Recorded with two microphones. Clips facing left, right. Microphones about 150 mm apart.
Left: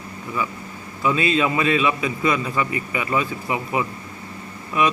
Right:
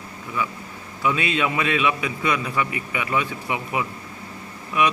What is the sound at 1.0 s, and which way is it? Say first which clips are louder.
A man's voice: left 3 dB; centre (ahead or behind).